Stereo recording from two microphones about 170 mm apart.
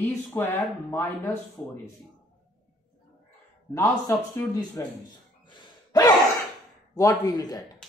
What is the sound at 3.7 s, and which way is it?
A man's voice, 15° left (ahead or behind).